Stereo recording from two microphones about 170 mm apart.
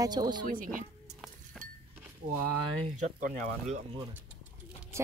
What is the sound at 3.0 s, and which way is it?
Speech, 45° right (ahead or behind).